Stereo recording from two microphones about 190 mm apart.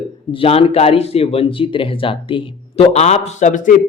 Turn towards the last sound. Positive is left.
turn(degrees=40)  # may be behind; listen again after turning